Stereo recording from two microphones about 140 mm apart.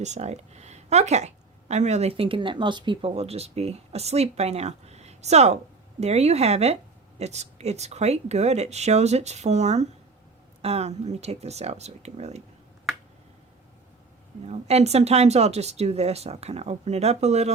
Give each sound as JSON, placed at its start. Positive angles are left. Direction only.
{"t": 0.0, "sound": "a woman's voice", "side_deg": -50}
{"t": 14.4, "sound": "a woman's voice", "side_deg": -50}